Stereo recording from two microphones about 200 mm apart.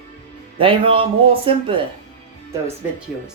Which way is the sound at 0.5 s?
25° right (ahead or behind).